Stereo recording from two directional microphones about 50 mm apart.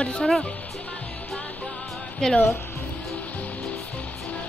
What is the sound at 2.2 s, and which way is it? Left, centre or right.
Speech, centre.